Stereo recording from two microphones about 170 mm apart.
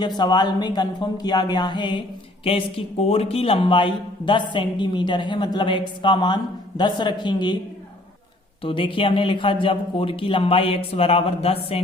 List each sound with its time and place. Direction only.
0.2 s a woman's voice: 25° left (ahead or behind)
8.6 s a man's voice: 30° left (ahead or behind)